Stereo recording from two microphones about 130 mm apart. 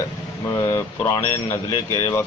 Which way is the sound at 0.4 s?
25° left (ahead or behind).